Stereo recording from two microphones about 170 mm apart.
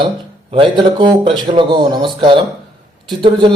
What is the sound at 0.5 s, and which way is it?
A man's voice, 30° right (ahead or behind).